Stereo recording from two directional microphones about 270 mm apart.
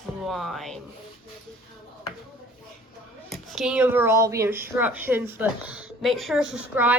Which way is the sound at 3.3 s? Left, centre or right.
Centre.